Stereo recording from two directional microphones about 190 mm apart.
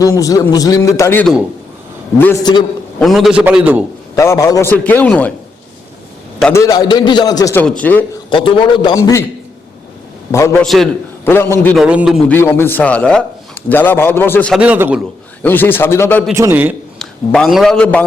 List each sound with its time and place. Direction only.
0.0 s a man's voice: 15° left (ahead or behind)
3.0 s a man's voice: centre (ahead or behind)
4.1 s a man's voice: 15° left (ahead or behind)
6.5 s a man's voice: 15° left (ahead or behind)
7.6 s a man's voice: 5° left (ahead or behind)
8.3 s a man's voice: 25° left (ahead or behind)
10.6 s a man's voice: centre (ahead or behind)
11.3 s a man's voice: 10° left (ahead or behind)
11.8 s a man's voice: 5° right (ahead or behind)
12.3 s a man's voice: 10° left (ahead or behind)
14.6 s a man's voice: 10° right (ahead or behind)
15.4 s a man's voice: 10° left (ahead or behind)
16.3 s a man's voice: 15° right (ahead or behind)
17.0 s a man's voice: centre (ahead or behind)